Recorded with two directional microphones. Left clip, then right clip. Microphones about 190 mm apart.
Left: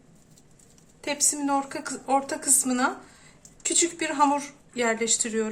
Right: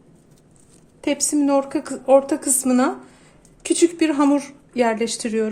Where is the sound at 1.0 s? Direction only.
40° right (ahead or behind).